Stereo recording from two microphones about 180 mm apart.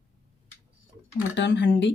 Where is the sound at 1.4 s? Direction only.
80° left.